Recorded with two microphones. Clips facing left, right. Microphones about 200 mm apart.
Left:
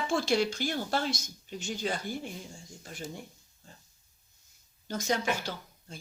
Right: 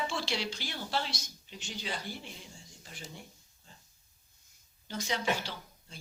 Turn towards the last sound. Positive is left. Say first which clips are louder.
# left 5 dB
turn(degrees=45)  # may be behind; listen again after turning